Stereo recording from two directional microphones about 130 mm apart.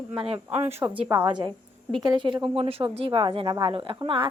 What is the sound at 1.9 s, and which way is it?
Speech, 35° right (ahead or behind).